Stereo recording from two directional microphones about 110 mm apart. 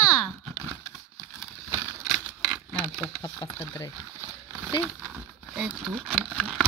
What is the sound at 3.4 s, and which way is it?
Speech, 30° left (ahead or behind).